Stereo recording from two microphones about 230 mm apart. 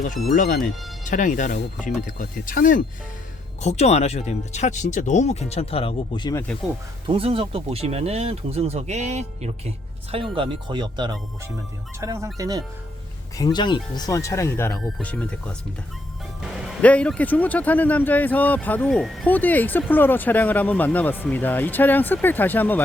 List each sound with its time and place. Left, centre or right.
1.0 s speech: left
7.1 s speech: right
13.4 s speech: centre